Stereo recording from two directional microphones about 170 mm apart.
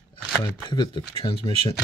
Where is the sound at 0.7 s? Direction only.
25° left (ahead or behind).